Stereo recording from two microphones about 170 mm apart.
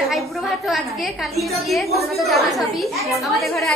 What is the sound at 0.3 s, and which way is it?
A woman's voice, centre (ahead or behind).